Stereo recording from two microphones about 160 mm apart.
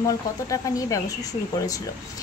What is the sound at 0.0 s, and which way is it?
A woman's voice, 20° left (ahead or behind).